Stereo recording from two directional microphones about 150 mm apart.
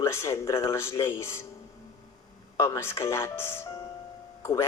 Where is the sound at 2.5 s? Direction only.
20° left (ahead or behind).